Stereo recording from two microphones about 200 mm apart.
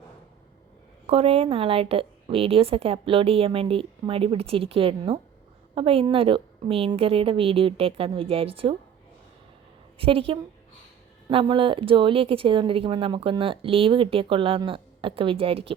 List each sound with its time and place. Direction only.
1.0 s speech: 30° right (ahead or behind)
10.0 s speech: 25° right (ahead or behind)